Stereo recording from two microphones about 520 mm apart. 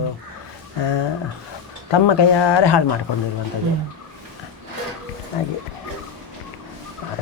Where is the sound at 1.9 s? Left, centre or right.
Left.